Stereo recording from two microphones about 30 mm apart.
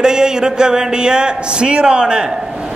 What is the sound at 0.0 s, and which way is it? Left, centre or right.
A man's voice, right.